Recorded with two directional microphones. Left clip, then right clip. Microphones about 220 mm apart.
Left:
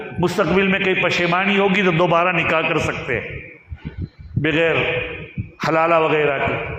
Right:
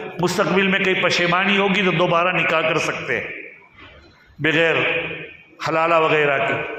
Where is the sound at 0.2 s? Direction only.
30° left (ahead or behind).